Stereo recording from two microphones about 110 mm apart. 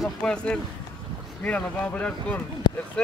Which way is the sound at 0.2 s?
10° left (ahead or behind).